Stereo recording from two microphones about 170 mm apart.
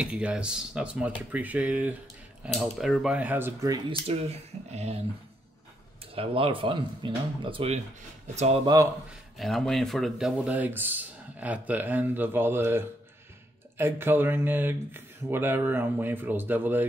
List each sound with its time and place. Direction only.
0.0 s speech: 5° right (ahead or behind)
4.1 s speech: 40° right (ahead or behind)
6.1 s speech: 30° right (ahead or behind)
9.4 s speech: centre (ahead or behind)